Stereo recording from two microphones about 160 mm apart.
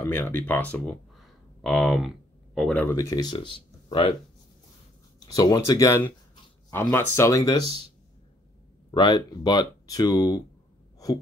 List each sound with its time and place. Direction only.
0.0 s speech: 15° left (ahead or behind); by 4.1 s 35° left (ahead or behind)
5.2 s speech: 25° left (ahead or behind)
8.9 s speech: 30° left (ahead or behind)